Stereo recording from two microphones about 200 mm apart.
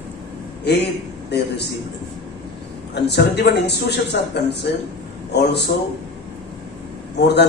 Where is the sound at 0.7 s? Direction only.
55° left (ahead or behind).